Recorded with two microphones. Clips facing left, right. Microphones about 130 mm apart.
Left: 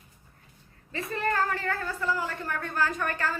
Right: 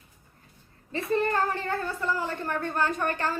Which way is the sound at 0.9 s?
30° right (ahead or behind).